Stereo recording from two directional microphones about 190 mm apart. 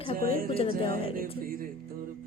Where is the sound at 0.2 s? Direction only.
50° right (ahead or behind).